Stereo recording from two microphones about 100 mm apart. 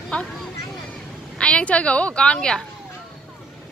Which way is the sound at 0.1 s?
15° left (ahead or behind).